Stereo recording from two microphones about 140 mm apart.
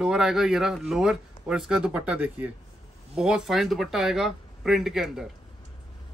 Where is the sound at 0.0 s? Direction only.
5° right (ahead or behind).